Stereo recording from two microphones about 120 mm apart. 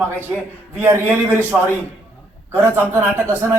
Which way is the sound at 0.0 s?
20° right (ahead or behind).